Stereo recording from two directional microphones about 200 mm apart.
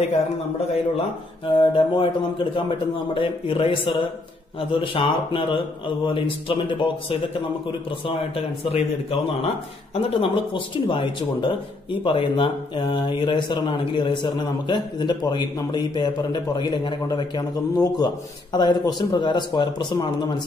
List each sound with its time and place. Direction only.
0.6 s speech: 30° left (ahead or behind)
3.2 s speech: 25° left (ahead or behind)